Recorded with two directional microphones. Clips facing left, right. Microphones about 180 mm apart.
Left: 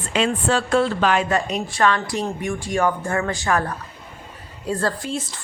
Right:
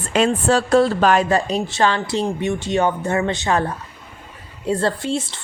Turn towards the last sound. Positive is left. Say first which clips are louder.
# right 4 dB
turn(degrees=-25)  # may be behind; listen again after turning